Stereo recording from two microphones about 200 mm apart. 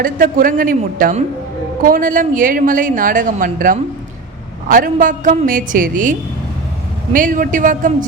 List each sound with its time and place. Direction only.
0.0 s a man's voice: 45° right (ahead or behind)